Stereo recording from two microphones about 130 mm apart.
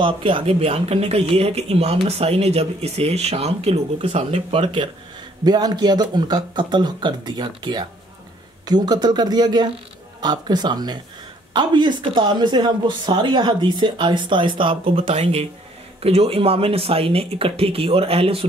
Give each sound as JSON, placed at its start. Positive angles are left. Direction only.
{"t": 0.0, "sound": "speech", "side_deg": -40}